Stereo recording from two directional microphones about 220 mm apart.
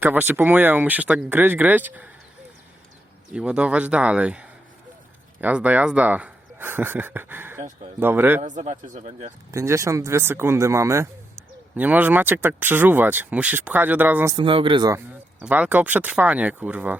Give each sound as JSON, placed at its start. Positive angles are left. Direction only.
{"t": 0.0, "sound": "speech", "side_deg": -10}
{"t": 3.3, "sound": "speech", "side_deg": -5}
{"t": 8.4, "sound": "speech", "side_deg": -35}
{"t": 9.5, "sound": "speech", "side_deg": -15}
{"t": 14.3, "sound": "speech", "side_deg": -25}